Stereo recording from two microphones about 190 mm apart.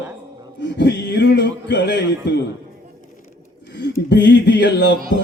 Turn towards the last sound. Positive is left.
turn(degrees=65)  # may be behind; listen again after turning